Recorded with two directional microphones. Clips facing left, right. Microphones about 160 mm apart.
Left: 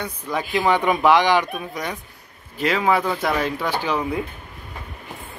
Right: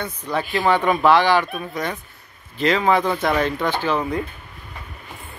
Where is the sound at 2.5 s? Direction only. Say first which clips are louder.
Right 2 dB; 10° left (ahead or behind).